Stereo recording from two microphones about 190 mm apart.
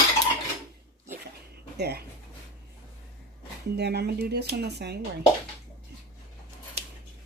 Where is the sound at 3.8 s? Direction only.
60° right (ahead or behind).